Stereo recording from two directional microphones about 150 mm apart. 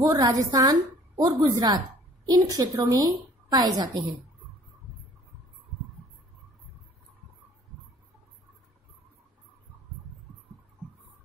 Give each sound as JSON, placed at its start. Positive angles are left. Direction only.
{"t": 0.0, "sound": "a woman's voice", "side_deg": -25}